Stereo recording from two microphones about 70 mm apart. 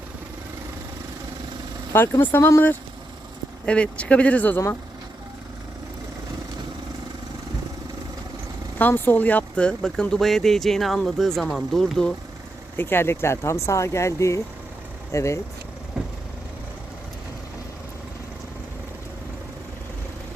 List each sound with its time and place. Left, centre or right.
2.0 s speech: left
3.7 s speech: centre
8.8 s speech: left; by 12.1 s centre
12.7 s speech: left
16.0 s vehicle: centre